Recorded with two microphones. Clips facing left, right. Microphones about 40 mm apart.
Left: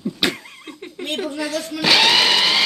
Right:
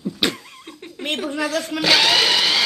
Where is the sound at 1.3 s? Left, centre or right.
Right.